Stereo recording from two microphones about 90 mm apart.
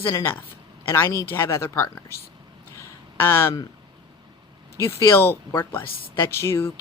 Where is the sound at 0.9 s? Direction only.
30° left (ahead or behind).